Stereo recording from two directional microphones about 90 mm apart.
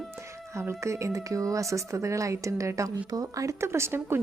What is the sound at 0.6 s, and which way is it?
A woman's voice, 30° right (ahead or behind).